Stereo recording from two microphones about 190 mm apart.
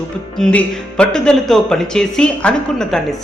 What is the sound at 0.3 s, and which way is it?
Speech, 5° left (ahead or behind).